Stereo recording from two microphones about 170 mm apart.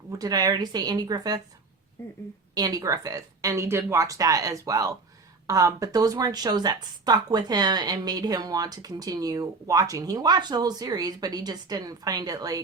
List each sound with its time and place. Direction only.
0.1 s speech: 20° right (ahead or behind)
2.6 s speech: 20° right (ahead or behind)